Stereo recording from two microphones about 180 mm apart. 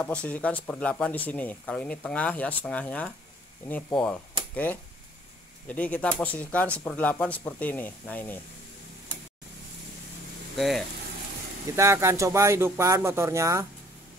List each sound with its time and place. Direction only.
0.0 s speech: 5° left (ahead or behind)
11.7 s speech: 15° right (ahead or behind)